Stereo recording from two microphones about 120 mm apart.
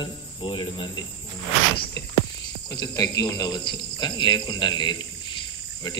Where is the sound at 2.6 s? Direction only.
35° left (ahead or behind).